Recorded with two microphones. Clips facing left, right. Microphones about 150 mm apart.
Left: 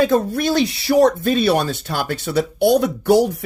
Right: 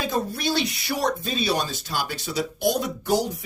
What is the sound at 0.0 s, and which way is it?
Speech, 55° left (ahead or behind).